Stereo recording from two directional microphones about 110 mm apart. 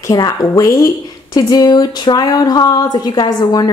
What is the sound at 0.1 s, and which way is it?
A woman's voice, 35° left (ahead or behind).